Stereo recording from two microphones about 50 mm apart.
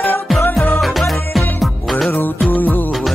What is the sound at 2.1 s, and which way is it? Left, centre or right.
Music, left.